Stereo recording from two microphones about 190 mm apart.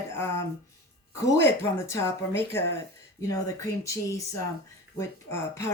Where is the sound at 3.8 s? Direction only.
15° left (ahead or behind).